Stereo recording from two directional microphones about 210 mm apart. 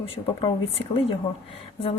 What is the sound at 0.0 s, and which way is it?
Speech, 25° left (ahead or behind).